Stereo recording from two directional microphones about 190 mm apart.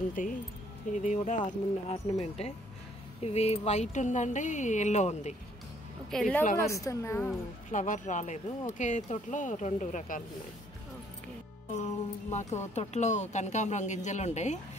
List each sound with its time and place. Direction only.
0.1 s speech: 45° left (ahead or behind)
6.0 s a woman's voice: 5° left (ahead or behind)
6.5 s speech: 15° left (ahead or behind)
7.7 s speech: 40° left (ahead or behind)
11.8 s speech: 40° left (ahead or behind)